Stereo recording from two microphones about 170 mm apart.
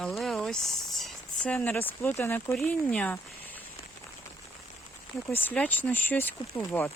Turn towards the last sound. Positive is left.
turn(degrees=10)  # may be behind; listen again after turning